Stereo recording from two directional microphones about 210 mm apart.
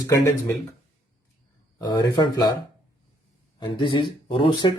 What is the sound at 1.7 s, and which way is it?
Speech, 20° left (ahead or behind).